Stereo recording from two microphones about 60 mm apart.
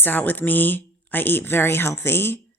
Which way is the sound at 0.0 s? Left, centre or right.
Left.